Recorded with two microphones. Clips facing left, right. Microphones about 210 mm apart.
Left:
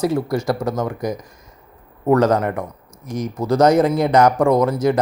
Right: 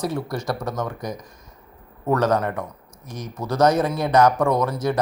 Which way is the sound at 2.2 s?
25° left (ahead or behind).